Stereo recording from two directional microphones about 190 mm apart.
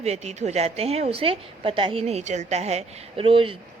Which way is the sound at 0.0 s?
35° right (ahead or behind).